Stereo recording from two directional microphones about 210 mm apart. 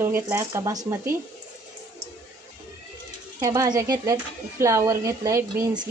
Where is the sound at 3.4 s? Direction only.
15° right (ahead or behind).